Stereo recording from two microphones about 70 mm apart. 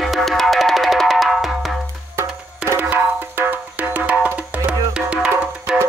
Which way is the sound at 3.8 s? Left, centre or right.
Right.